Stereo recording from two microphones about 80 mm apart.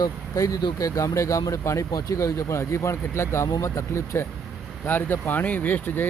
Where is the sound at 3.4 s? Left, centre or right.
Left.